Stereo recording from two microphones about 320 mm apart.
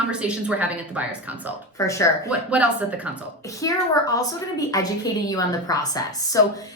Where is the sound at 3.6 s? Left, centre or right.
Centre.